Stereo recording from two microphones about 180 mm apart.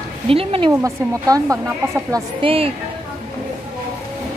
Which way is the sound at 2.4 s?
30° right (ahead or behind).